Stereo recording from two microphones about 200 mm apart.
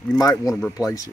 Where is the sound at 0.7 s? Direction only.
15° left (ahead or behind).